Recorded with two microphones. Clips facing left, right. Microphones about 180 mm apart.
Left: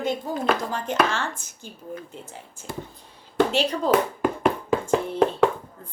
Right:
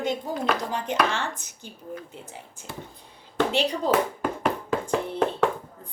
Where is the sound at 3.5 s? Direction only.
15° right (ahead or behind).